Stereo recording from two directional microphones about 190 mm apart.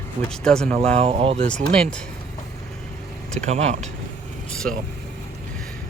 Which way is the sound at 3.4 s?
35° right (ahead or behind).